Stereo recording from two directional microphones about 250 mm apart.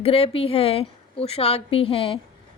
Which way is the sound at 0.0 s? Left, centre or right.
Left.